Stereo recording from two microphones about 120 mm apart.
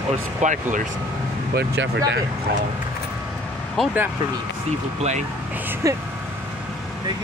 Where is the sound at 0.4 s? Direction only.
90° right.